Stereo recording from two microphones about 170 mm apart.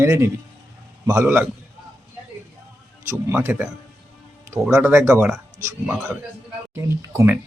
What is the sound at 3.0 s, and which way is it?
Speech, 15° right (ahead or behind).